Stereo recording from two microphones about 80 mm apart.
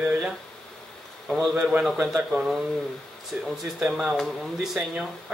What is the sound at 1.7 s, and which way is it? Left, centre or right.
Speech, centre.